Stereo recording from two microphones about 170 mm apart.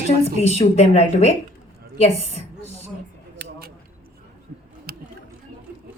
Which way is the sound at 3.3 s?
75° right (ahead or behind).